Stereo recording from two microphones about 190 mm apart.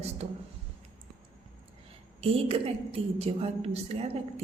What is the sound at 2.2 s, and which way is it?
A woman's voice, 30° right (ahead or behind).